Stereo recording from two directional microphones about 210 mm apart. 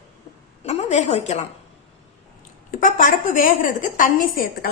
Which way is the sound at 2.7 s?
40° left (ahead or behind).